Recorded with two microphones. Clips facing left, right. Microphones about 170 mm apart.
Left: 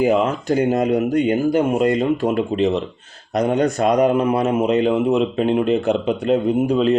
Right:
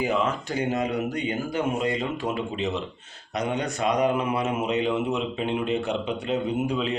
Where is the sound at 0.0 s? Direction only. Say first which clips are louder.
Left 8 dB; 50° left (ahead or behind).